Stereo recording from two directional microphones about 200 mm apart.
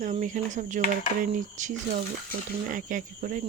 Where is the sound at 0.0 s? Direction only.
40° right (ahead or behind).